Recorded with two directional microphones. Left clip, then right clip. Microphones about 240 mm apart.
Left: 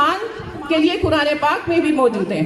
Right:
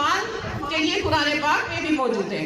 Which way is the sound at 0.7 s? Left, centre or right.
Left.